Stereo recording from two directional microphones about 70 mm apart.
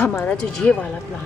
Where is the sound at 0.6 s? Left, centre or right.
Centre.